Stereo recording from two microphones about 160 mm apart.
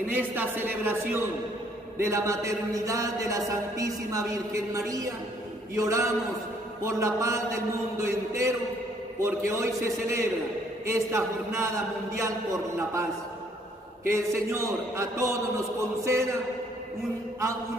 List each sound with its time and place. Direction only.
0.1 s a man's voice: 10° right (ahead or behind)
14.0 s a man's voice: 15° right (ahead or behind)